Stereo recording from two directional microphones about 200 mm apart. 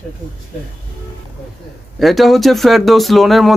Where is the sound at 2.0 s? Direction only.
Centre (ahead or behind).